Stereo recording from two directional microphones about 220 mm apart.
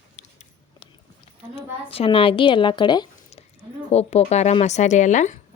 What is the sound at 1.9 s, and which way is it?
Speech, 25° left (ahead or behind).